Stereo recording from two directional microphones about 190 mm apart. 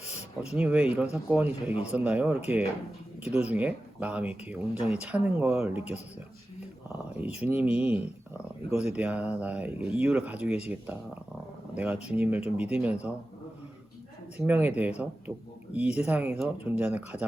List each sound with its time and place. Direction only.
0.0 s speech: 5° right (ahead or behind)
7.3 s speech: 5° right (ahead or behind)
14.3 s speech: 10° right (ahead or behind)